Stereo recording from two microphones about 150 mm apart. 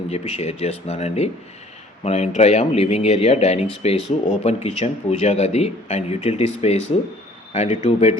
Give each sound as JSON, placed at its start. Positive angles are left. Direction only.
{"t": 0.1, "sound": "speech", "side_deg": 45}